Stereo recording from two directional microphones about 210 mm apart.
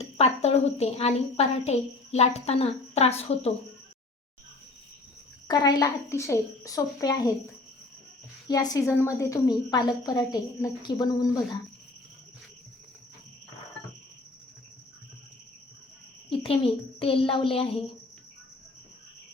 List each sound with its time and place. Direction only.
0.0 s a woman's voice: 30° left (ahead or behind)
5.5 s a woman's voice: 20° left (ahead or behind)
8.4 s a woman's voice: 15° left (ahead or behind)
16.3 s a woman's voice: 25° left (ahead or behind)